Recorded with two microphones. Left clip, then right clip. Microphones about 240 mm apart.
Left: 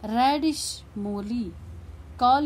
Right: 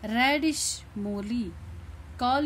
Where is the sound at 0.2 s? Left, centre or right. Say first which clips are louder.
Left 2 dB; centre.